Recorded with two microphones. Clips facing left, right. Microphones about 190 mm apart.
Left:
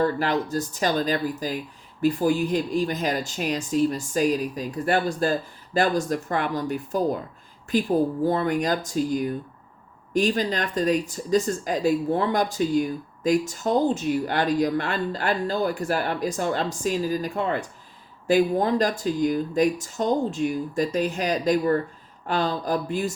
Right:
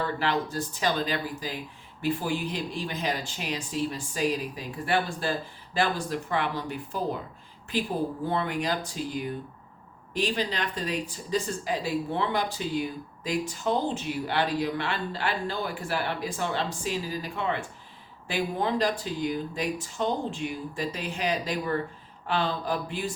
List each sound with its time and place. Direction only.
0.0 s speech: 45° left (ahead or behind)
8.2 s speech: 40° left (ahead or behind)